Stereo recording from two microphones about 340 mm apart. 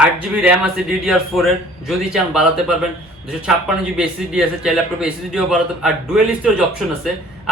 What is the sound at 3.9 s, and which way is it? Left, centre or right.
A man's voice, centre.